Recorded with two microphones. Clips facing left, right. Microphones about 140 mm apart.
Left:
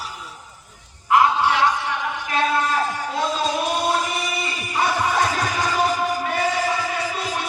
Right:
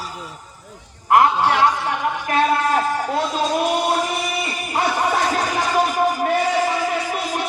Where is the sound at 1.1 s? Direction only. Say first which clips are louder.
Right 2 dB; 50° right (ahead or behind).